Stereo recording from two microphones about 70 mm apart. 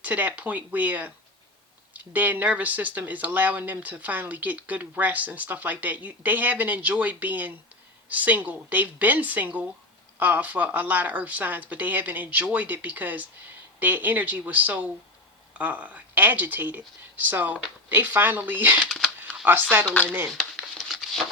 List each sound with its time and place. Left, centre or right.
0.0 s speech: right
18.8 s speech: centre
19.4 s speech: right
19.8 s speech: centre
20.3 s a sound: centre